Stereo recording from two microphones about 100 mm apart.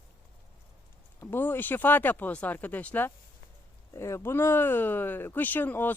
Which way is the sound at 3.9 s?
30° left (ahead or behind).